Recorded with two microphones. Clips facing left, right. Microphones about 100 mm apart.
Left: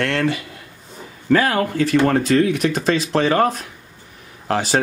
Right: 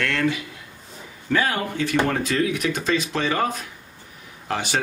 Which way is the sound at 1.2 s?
45° left (ahead or behind).